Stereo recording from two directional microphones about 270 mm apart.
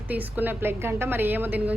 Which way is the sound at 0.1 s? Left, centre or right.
Centre.